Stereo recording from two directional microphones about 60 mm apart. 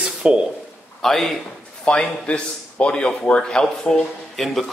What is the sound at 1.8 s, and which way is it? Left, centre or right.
Speech, centre.